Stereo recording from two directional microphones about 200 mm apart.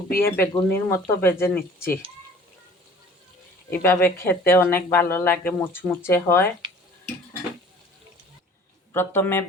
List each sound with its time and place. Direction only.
0.2 s speech: 10° left (ahead or behind)
3.7 s speech: 10° left (ahead or behind)
8.9 s speech: 10° left (ahead or behind)